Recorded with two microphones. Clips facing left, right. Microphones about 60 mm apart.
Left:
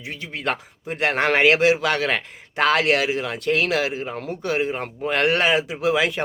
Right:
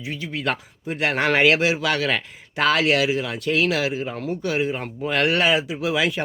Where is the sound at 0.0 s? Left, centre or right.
Left.